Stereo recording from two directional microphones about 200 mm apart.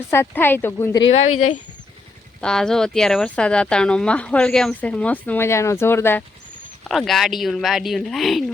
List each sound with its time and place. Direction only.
0.1 s speech: 10° left (ahead or behind)
2.4 s speech: 5° left (ahead or behind)
6.8 s speech: centre (ahead or behind)